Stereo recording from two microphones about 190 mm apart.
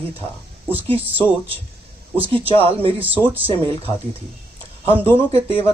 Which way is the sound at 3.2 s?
10° left (ahead or behind).